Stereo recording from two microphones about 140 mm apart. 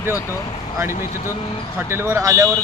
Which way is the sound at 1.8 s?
20° right (ahead or behind).